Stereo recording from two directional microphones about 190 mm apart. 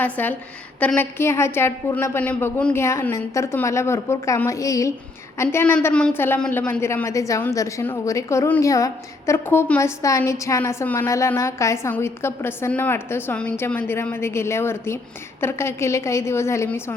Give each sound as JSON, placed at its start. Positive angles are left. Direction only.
{"t": 0.0, "sound": "a woman's voice", "side_deg": 10}